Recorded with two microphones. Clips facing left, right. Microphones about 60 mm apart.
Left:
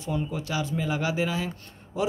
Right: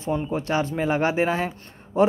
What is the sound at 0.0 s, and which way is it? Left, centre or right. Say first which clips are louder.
Speech: right 5 dB; right.